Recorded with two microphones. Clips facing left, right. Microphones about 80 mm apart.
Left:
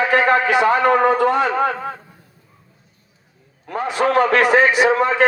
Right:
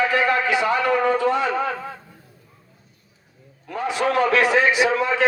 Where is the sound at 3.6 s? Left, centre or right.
Left.